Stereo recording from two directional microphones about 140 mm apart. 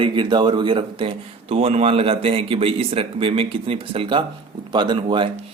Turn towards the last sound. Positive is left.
turn(degrees=-35)  # may be behind; listen again after turning